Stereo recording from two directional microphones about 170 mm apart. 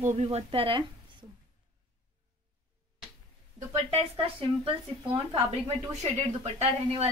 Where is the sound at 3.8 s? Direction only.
30° right (ahead or behind).